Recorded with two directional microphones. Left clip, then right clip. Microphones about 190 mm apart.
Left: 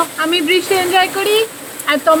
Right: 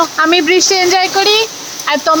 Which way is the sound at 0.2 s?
15° right (ahead or behind).